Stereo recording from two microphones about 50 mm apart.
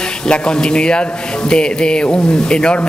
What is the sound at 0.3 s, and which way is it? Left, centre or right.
Speech, centre.